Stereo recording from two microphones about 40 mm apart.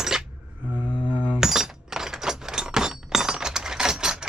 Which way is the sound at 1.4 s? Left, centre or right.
Centre.